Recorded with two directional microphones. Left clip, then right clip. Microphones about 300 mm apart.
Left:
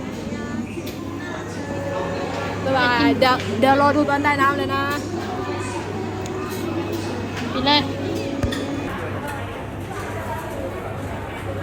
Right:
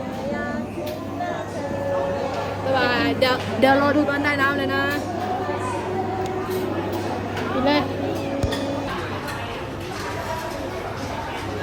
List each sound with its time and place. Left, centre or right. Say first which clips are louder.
2.7 s speech: left 3 dB; centre
7.6 s speech: left 3 dB; left